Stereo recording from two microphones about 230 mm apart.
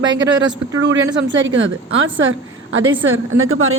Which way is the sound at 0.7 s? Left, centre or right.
Right.